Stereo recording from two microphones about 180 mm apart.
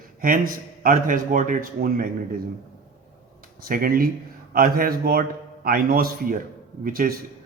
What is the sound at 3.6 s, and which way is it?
A man's voice, 50° right (ahead or behind).